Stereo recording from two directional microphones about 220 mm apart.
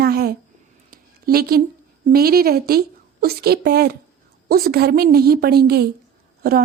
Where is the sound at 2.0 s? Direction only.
45° right (ahead or behind).